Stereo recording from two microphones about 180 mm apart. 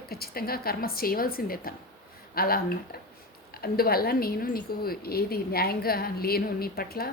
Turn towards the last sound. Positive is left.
turn(degrees=55)  # may be behind; listen again after turning